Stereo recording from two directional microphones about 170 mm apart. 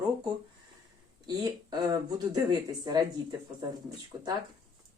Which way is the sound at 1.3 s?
25° right (ahead or behind).